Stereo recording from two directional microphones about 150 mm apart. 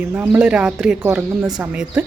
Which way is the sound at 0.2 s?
10° right (ahead or behind).